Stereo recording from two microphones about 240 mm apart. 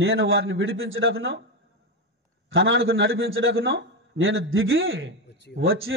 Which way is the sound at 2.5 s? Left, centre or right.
Right.